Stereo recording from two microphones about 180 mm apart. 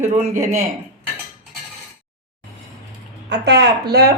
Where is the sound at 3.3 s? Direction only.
70° right (ahead or behind).